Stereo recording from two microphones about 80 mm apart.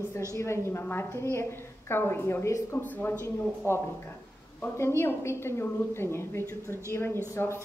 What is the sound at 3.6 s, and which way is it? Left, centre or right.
Speech, left.